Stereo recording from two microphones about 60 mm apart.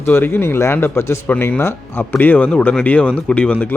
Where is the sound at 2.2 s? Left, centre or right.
Left.